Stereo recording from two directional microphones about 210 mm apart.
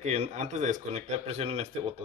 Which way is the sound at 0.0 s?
35° right (ahead or behind).